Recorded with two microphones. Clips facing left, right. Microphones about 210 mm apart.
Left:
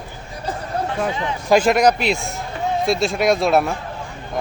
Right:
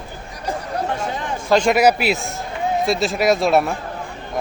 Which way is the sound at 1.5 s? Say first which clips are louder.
Left 1 dB; 5° left (ahead or behind).